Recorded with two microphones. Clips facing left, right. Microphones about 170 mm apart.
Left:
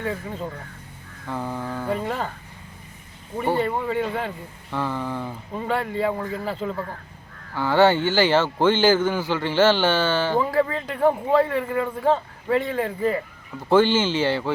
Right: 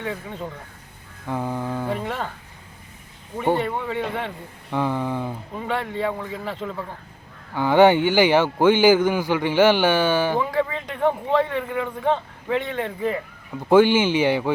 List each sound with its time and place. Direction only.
0.0 s a man's voice: 5° left (ahead or behind)
1.3 s speech: 15° right (ahead or behind)
1.9 s a man's voice: centre (ahead or behind)
3.5 s speech: 10° left (ahead or behind)
4.7 s speech: 15° right (ahead or behind)
5.5 s a man's voice: centre (ahead or behind)
7.5 s speech: 15° right (ahead or behind)
10.4 s a man's voice: centre (ahead or behind)
13.7 s speech: 10° right (ahead or behind)